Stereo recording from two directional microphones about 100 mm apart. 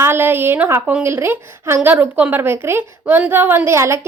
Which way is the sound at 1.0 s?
25° right (ahead or behind).